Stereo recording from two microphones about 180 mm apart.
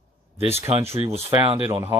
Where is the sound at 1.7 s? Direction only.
15° right (ahead or behind).